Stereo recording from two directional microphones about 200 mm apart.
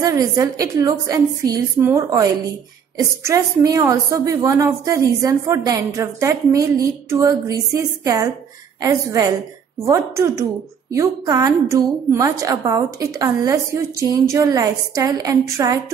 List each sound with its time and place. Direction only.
0.0 s a woman's voice: 15° right (ahead or behind)
3.3 s a woman's voice: 15° right (ahead or behind)